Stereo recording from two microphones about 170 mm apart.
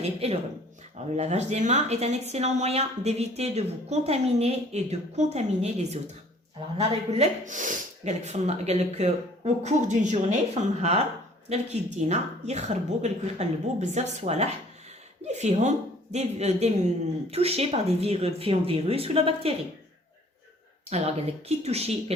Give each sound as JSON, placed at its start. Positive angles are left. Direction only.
{"t": 0.0, "sound": "speech", "side_deg": -35}
{"t": 20.9, "sound": "speech", "side_deg": -40}